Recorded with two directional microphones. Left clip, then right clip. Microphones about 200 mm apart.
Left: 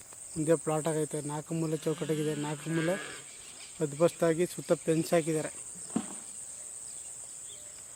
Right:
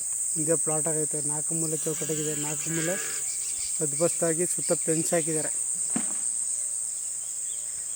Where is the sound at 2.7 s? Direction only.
10° left (ahead or behind).